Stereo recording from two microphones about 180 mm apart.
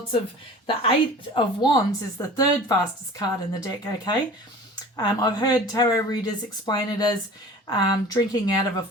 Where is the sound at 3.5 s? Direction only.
20° left (ahead or behind).